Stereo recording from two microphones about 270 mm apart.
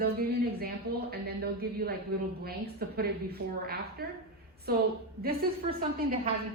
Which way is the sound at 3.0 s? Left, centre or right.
Right.